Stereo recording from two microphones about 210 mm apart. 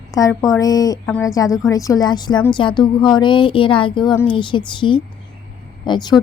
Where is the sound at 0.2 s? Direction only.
15° left (ahead or behind).